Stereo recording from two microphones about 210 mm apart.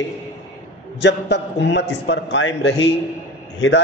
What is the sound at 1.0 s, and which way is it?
A man's voice, 55° left (ahead or behind).